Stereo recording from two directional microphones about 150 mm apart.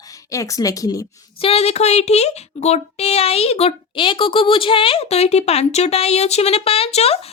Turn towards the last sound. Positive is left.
turn(degrees=45)  # may be behind; listen again after turning